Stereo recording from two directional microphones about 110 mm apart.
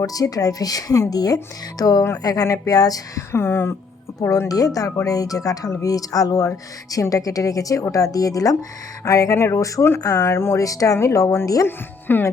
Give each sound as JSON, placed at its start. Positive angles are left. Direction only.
{"t": 0.0, "sound": "speech", "side_deg": 35}